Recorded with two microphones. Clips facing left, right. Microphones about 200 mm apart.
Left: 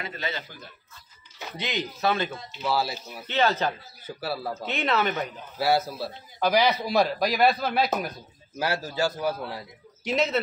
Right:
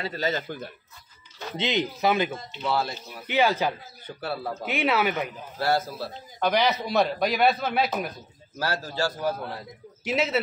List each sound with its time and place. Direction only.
0.0 s speech: 40° right (ahead or behind)
1.6 s speech: 20° right (ahead or behind)
2.6 s a man's voice: 5° left (ahead or behind)
3.3 s speech: 10° right (ahead or behind)
4.2 s a man's voice: centre (ahead or behind)
4.6 s speech: 10° right (ahead or behind)
5.6 s a man's voice: 10° left (ahead or behind)
8.5 s a man's voice: 10° left (ahead or behind)
10.0 s a man's voice: 5° right (ahead or behind)